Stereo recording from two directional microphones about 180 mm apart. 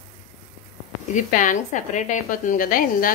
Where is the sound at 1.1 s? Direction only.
45° left (ahead or behind).